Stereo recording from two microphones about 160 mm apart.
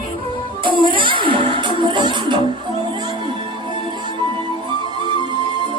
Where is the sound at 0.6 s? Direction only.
30° right (ahead or behind).